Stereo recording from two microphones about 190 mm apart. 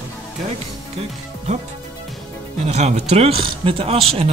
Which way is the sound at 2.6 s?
35° right (ahead or behind).